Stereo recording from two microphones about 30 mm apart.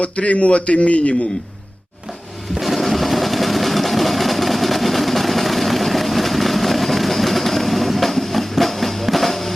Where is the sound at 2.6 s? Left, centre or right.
Centre.